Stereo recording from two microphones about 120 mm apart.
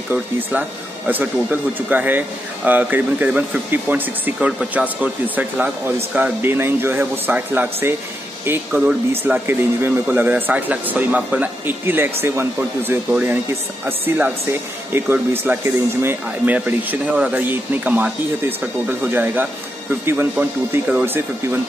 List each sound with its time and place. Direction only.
0.1 s speech: 15° right (ahead or behind)